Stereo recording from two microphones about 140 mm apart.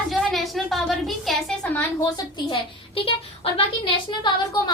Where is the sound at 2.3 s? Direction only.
35° left (ahead or behind).